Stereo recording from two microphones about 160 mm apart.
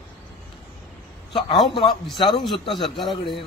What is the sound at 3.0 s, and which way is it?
Speech, 30° left (ahead or behind).